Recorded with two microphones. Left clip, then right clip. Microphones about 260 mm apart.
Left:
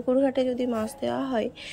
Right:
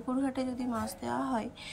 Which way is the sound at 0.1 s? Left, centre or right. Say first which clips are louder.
Left 11 dB; centre.